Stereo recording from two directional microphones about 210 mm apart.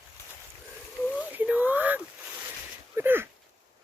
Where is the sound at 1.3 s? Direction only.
5° right (ahead or behind).